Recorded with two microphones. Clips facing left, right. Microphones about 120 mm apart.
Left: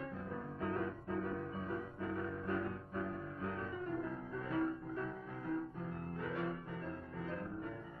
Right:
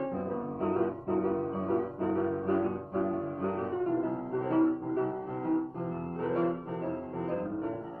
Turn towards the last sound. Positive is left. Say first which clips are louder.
# right 11 dB
turn(degrees=-40)  # may be behind; listen again after turning